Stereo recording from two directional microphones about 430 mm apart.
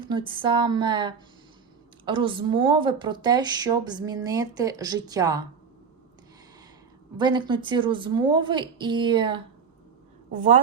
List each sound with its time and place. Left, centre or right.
0.0 s speech: centre
7.2 s speech: centre